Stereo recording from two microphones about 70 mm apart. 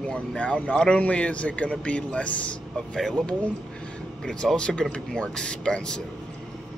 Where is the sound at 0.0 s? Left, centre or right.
Centre.